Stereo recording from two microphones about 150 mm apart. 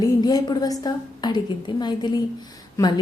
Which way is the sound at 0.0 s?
25° left (ahead or behind).